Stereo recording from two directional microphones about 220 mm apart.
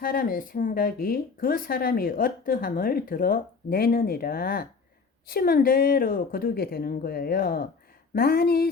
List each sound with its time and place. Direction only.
0.0 s a woman's voice: 40° left (ahead or behind)